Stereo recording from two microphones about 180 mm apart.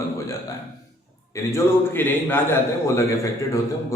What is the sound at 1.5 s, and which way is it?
A man's voice, 10° left (ahead or behind).